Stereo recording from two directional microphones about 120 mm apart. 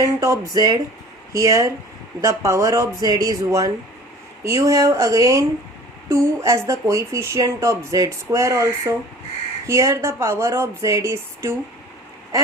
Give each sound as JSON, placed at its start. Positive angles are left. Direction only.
{"t": 0.0, "sound": "speech", "side_deg": -25}